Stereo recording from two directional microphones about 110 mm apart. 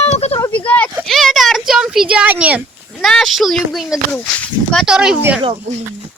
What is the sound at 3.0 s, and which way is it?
Speech, centre (ahead or behind).